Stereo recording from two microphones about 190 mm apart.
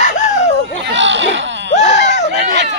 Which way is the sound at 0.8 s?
70° right (ahead or behind).